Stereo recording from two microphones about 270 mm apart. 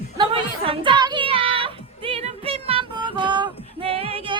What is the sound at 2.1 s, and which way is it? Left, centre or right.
Female singing, right.